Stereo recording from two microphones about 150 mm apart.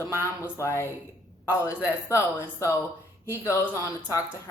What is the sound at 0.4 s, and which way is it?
A woman's voice, 20° left (ahead or behind).